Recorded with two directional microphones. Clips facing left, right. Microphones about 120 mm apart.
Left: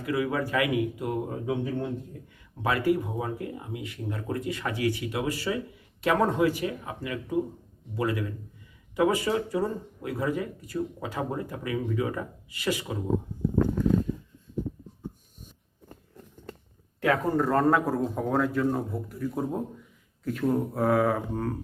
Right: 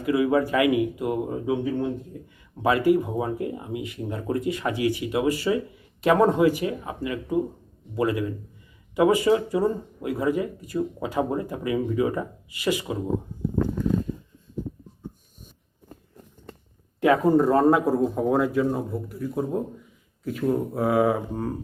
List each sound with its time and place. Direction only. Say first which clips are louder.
0.0 s speech: right 6 dB; 20° right (ahead or behind)
2.6 s speech: right 5 dB; 20° right (ahead or behind)
17.0 s speech: right 6 dB; 20° right (ahead or behind)